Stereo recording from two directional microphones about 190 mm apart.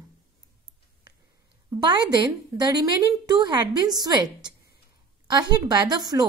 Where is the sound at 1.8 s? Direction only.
25° right (ahead or behind).